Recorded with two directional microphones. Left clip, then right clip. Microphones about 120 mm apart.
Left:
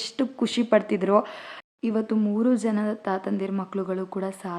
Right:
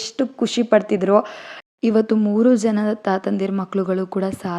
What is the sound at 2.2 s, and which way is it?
Speech, 40° right (ahead or behind).